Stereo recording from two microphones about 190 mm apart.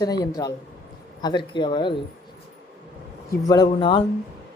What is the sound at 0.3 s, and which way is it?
Speech, 20° left (ahead or behind).